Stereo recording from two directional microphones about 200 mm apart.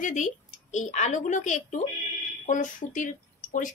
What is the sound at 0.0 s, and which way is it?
A woman's voice, 40° left (ahead or behind).